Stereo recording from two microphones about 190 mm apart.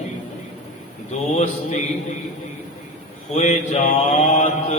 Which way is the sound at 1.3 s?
35° left (ahead or behind).